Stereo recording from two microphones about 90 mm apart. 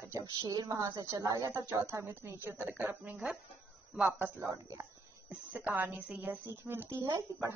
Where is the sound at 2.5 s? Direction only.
15° right (ahead or behind).